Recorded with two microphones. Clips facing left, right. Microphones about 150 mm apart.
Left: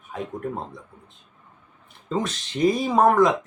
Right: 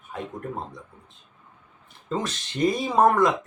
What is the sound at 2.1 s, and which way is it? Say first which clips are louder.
Speech: left 2 dB; centre (ahead or behind).